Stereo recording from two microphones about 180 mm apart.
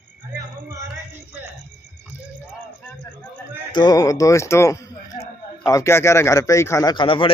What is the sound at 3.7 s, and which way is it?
A man's voice, 25° left (ahead or behind).